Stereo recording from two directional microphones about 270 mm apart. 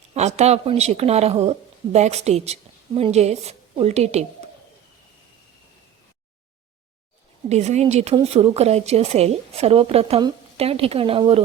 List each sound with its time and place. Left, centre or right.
0.1 s speech: right
7.5 s speech: right